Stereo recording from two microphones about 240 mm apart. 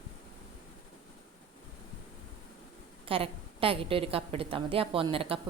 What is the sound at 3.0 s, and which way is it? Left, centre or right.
Speech, right.